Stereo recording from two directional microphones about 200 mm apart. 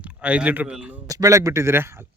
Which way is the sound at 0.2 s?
5° right (ahead or behind).